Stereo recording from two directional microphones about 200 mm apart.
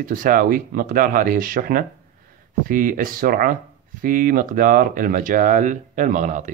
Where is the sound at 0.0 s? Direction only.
45° right (ahead or behind).